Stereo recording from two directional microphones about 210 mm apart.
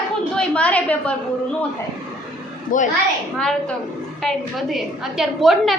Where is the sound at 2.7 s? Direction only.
40° left (ahead or behind).